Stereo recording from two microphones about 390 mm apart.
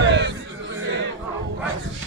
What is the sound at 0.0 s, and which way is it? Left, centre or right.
Music, right.